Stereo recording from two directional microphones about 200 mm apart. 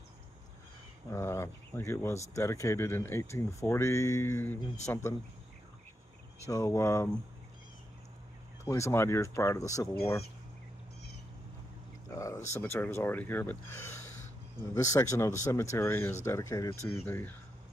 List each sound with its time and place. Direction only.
1.1 s speech: 15° left (ahead or behind)
6.4 s speech: 15° left (ahead or behind)
8.6 s speech: 15° left (ahead or behind)
12.2 s speech: 15° left (ahead or behind)